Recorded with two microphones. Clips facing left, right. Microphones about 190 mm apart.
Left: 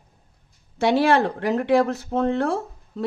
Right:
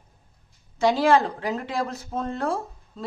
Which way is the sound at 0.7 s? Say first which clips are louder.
Left 1 dB; 65° left (ahead or behind).